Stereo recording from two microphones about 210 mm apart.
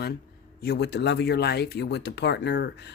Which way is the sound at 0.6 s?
50° left (ahead or behind).